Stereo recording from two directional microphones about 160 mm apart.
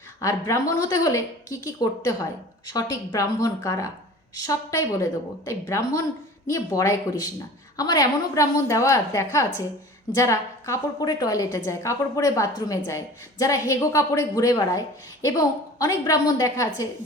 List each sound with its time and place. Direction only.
0.2 s a woman's voice: 20° left (ahead or behind)